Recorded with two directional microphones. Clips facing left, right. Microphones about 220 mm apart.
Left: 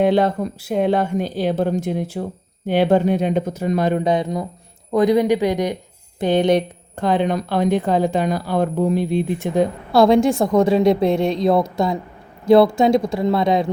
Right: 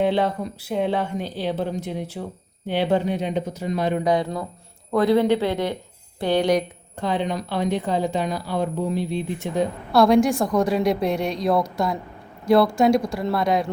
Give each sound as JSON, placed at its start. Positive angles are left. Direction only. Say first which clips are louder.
{"t": 0.0, "sound": "a woman's voice", "louder": "left 5 dB", "side_deg": 45}
{"t": 4.0, "sound": "speech", "louder": "left 2 dB", "side_deg": 20}
{"t": 6.9, "sound": "a woman's voice", "louder": "left 6 dB", "side_deg": 50}
{"t": 10.0, "sound": "speech", "louder": "left 3 dB", "side_deg": 25}